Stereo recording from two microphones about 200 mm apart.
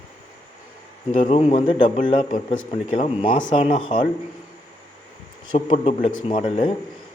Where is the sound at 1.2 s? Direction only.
30° left (ahead or behind).